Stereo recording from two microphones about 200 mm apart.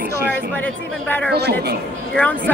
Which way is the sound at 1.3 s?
55° right (ahead or behind).